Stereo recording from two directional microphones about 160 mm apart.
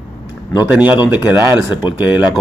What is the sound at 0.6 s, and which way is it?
Speech, 10° right (ahead or behind).